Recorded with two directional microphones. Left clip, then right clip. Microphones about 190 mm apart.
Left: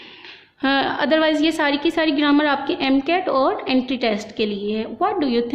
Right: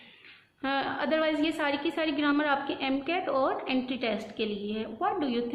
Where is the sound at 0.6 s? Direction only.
50° left (ahead or behind).